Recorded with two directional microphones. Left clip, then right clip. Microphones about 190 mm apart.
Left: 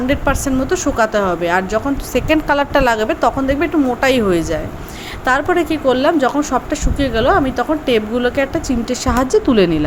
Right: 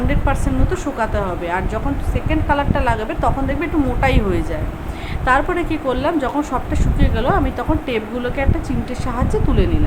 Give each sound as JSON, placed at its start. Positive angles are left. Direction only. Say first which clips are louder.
{"t": 0.1, "sound": "a woman's voice", "louder": "left 5 dB", "side_deg": 25}